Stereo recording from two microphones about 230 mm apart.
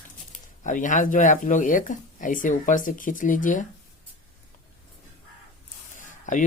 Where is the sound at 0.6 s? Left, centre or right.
Left.